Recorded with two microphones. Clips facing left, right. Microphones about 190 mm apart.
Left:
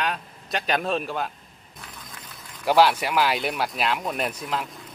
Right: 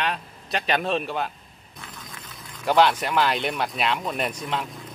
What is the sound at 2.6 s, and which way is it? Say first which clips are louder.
Speech: left 1 dB; 10° left (ahead or behind).